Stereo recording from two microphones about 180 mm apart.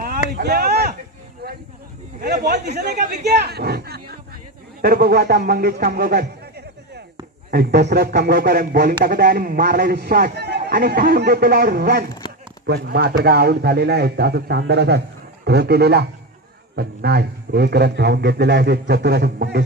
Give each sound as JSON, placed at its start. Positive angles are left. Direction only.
{"t": 0.0, "sound": "speech", "side_deg": -60}
{"t": 1.4, "sound": "a sound", "side_deg": -55}
{"t": 2.1, "sound": "speech", "side_deg": -55}